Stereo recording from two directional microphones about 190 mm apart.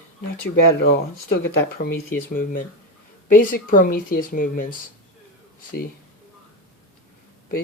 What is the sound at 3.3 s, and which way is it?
Speech, 45° left (ahead or behind).